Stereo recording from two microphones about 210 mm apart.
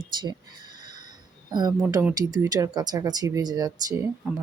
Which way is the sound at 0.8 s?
20° right (ahead or behind).